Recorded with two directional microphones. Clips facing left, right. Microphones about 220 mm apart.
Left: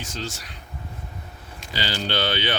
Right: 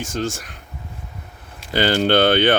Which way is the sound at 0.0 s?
50° right (ahead or behind).